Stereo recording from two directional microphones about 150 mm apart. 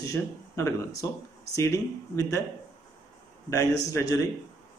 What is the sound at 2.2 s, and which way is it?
Speech, 20° left (ahead or behind).